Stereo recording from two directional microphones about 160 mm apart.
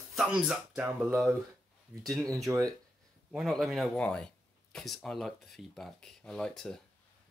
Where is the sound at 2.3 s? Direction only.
20° right (ahead or behind).